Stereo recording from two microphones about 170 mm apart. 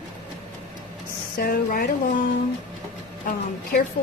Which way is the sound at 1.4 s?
60° left (ahead or behind).